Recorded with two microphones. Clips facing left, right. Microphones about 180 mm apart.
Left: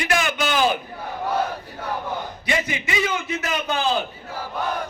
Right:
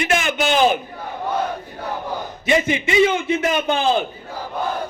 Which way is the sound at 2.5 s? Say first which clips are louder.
Right 7 dB; 25° right (ahead or behind).